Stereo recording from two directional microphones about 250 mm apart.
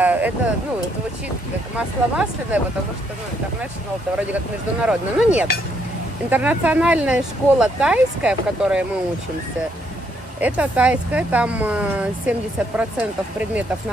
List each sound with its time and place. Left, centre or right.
0.0 s a sound: centre
1.8 s speech: centre
4.8 s speech: centre
10.4 s speech: centre